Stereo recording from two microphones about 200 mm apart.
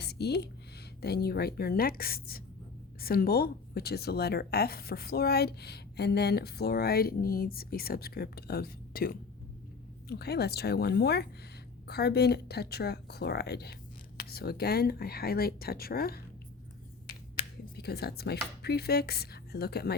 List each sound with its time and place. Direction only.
0.0 s a sound: 55° left (ahead or behind)
1.0 s speech: 50° left (ahead or behind)
17.7 s speech: 55° left (ahead or behind)